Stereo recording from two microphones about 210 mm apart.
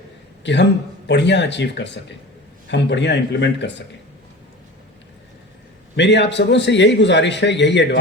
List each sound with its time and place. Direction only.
0.4 s a man's voice: 55° left (ahead or behind)
6.0 s a man's voice: 55° left (ahead or behind)